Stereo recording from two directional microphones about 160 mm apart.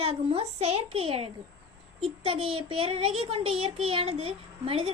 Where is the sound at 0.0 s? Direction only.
40° right (ahead or behind).